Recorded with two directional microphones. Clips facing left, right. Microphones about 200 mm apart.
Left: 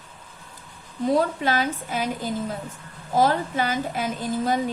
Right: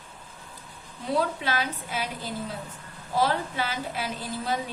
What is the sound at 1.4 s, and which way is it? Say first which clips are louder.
A woman's voice: left 5 dB; 45° left (ahead or behind).